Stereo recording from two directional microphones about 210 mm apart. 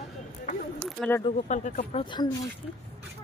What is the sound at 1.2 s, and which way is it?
Speech, 35° left (ahead or behind).